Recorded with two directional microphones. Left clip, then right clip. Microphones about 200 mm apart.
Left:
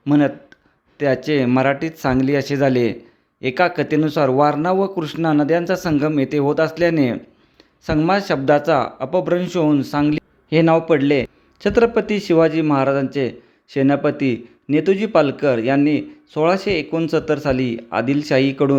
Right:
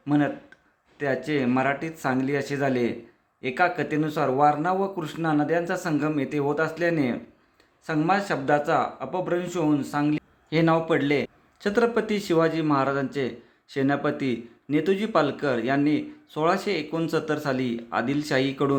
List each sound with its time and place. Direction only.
0.0 s speech: 40° left (ahead or behind)